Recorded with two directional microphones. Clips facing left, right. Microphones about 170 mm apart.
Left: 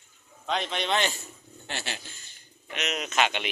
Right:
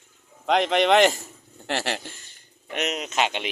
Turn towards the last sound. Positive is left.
turn(degrees=-25)  # may be behind; listen again after turning